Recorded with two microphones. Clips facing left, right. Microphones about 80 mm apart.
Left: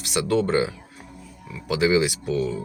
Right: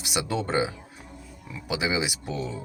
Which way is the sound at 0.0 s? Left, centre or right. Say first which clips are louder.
Left 6 dB; centre.